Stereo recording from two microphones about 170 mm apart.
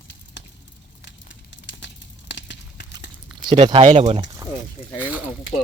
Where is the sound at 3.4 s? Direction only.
30° right (ahead or behind).